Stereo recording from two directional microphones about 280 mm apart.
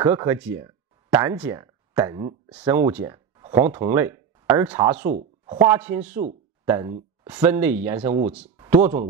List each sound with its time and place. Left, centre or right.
0.0 s speech: centre
8.0 s speech: right
8.5 s speech: centre